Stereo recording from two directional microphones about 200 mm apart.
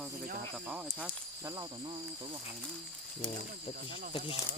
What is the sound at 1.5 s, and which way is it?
Cricket, 20° right (ahead or behind).